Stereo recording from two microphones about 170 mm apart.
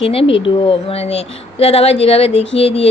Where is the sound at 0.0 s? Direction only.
35° left (ahead or behind).